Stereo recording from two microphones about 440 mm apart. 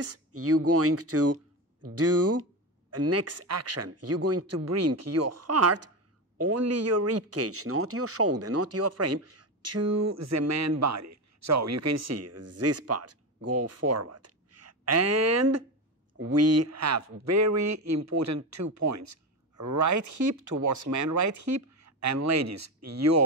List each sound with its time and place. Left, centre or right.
0.0 s speech: right